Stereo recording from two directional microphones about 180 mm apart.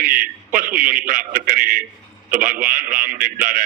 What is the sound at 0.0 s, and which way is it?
A man's voice, 50° right (ahead or behind).